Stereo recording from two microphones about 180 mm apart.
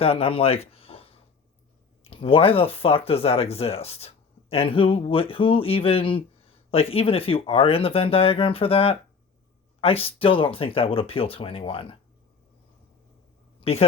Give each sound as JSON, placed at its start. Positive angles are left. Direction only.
{"t": 0.0, "sound": "speech", "side_deg": 30}
{"t": 13.6, "sound": "speech", "side_deg": 35}